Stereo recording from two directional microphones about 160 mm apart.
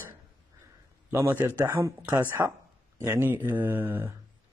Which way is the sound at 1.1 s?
15° right (ahead or behind).